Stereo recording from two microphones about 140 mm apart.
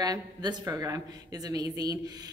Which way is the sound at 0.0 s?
30° right (ahead or behind).